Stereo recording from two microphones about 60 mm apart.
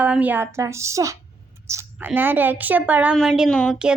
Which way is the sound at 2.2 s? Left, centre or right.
Right.